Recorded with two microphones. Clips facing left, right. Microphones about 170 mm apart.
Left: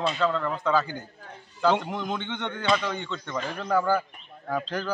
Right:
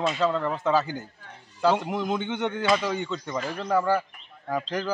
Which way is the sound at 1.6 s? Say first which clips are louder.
Right 1 dB; 5° right (ahead or behind).